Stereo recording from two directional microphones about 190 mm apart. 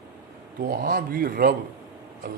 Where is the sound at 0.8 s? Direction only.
50° right (ahead or behind).